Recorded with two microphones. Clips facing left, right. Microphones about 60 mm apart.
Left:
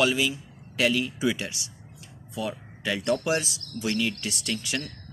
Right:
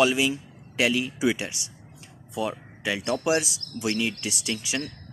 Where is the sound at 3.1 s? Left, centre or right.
Centre.